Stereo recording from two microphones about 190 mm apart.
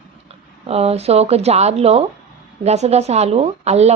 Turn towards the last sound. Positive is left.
turn(degrees=-35)  # may be behind; listen again after turning